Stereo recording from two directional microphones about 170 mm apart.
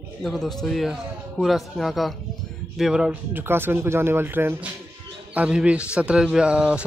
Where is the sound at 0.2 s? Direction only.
Centre (ahead or behind).